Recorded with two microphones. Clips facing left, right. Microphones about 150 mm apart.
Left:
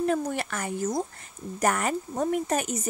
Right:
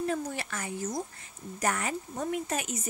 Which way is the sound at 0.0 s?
55° left (ahead or behind).